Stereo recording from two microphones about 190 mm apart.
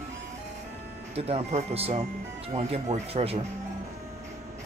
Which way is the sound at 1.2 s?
30° right (ahead or behind).